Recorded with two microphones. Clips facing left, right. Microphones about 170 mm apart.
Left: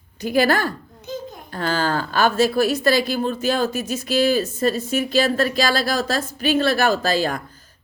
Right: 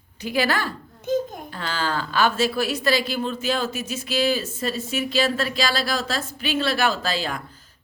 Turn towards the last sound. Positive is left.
turn(degrees=45)  # may be behind; listen again after turning